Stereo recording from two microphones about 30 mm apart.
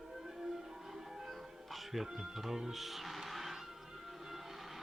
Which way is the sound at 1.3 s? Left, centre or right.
Centre.